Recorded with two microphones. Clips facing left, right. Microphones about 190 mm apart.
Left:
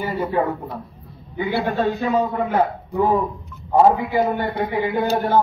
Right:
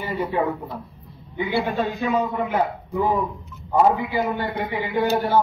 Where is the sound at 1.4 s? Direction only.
50° left (ahead or behind).